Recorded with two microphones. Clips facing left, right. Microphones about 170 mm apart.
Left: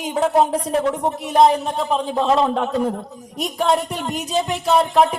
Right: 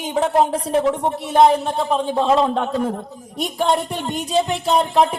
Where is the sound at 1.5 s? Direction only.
30° right (ahead or behind).